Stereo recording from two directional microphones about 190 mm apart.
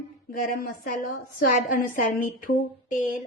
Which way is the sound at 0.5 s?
45° left (ahead or behind).